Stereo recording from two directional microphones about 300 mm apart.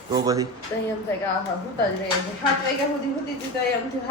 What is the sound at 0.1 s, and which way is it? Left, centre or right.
Speech, centre.